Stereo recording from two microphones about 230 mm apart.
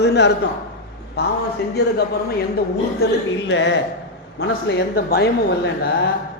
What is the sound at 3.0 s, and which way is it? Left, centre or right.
A woman's voice, left.